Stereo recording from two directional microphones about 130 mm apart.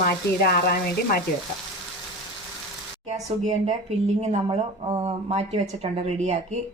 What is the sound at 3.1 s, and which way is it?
A woman's voice, 60° right (ahead or behind).